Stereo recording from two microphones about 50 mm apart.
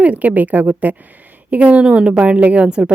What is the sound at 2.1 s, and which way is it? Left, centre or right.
Speech, right.